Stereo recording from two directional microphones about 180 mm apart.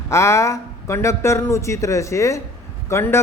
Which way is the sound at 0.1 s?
15° left (ahead or behind).